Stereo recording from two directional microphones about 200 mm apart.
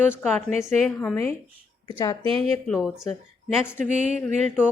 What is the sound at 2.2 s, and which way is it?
Speech, 30° right (ahead or behind).